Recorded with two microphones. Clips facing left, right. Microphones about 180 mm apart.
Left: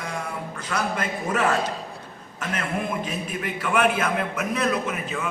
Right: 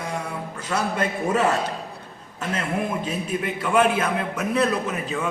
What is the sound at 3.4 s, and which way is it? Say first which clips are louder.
A man's voice: right 2 dB; 25° right (ahead or behind).